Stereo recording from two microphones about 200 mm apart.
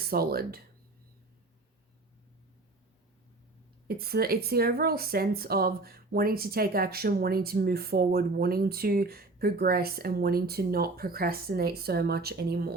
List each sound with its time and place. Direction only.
0.0 s speech: 50° right (ahead or behind)
3.8 s speech: 50° right (ahead or behind)